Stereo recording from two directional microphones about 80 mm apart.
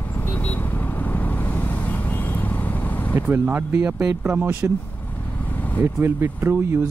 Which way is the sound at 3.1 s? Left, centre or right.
Right.